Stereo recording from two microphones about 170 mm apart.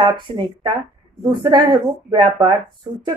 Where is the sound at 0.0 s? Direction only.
25° right (ahead or behind).